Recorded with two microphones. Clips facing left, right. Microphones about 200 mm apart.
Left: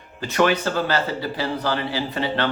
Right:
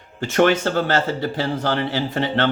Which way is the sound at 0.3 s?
50° right (ahead or behind).